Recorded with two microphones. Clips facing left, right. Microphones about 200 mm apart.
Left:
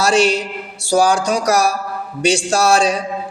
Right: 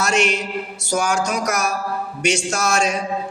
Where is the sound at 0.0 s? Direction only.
35° left (ahead or behind).